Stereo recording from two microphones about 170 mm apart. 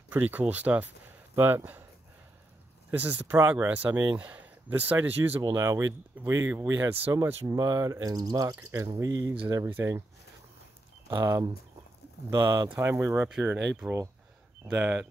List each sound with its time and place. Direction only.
0.1 s speech: 10° right (ahead or behind)
2.9 s speech: 10° right (ahead or behind)
5.4 s speech: 20° right (ahead or behind)
11.1 s speech: 15° right (ahead or behind)